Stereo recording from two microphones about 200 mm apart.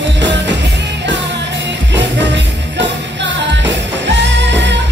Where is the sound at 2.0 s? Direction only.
65° right (ahead or behind).